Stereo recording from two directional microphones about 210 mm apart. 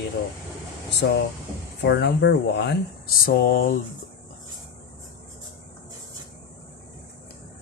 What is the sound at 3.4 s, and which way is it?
Speech, 45° left (ahead or behind).